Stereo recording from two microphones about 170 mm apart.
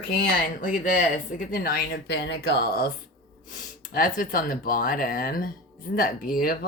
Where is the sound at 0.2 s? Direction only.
50° left (ahead or behind).